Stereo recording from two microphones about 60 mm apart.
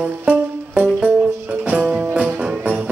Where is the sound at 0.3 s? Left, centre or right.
Right.